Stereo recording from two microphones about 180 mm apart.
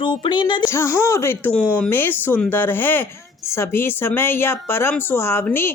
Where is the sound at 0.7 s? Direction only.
15° left (ahead or behind).